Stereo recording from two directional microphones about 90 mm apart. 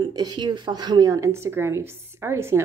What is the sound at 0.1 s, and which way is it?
Speech, 50° right (ahead or behind).